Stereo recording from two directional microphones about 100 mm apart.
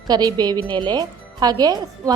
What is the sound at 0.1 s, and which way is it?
A woman's voice, 40° right (ahead or behind).